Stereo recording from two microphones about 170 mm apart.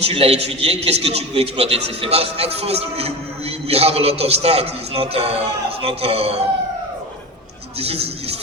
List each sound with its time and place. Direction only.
0.0 s a man's voice: 35° right (ahead or behind)
7.8 s a man's voice: 35° right (ahead or behind)